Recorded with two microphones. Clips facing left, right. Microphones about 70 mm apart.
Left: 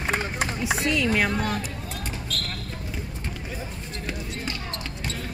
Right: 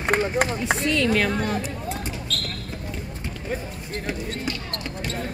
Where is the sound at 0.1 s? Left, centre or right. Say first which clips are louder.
Right 7 dB; right.